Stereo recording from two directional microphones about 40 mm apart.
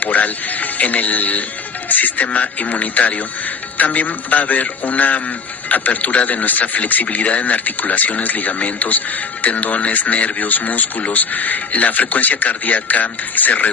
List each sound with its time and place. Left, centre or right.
0.0 s a man's voice: left